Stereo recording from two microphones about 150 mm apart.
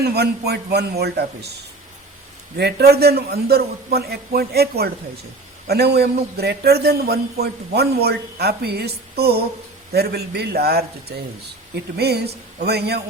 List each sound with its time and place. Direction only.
0.0 s a man's voice: 90° right
2.6 s a man's voice: 90° right
11.9 s a man's voice: 90° right